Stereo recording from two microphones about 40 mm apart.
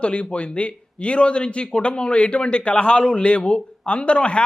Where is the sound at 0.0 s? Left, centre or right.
Left.